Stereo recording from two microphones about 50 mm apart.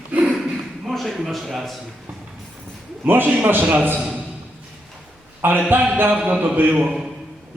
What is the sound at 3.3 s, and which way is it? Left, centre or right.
Speech, right.